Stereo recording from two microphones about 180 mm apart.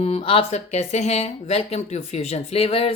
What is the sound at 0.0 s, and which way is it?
Speech, 30° left (ahead or behind).